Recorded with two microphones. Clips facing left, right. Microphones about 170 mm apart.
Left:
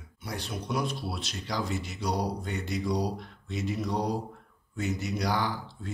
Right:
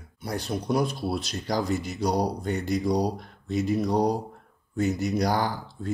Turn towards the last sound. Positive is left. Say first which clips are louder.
# right 5 dB
turn(degrees=-40)  # may be behind; listen again after turning